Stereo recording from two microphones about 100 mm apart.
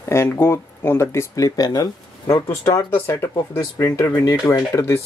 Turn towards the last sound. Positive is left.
turn(degrees=30)  # may be behind; listen again after turning